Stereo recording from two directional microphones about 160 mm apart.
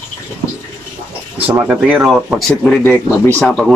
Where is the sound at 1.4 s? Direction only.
10° right (ahead or behind).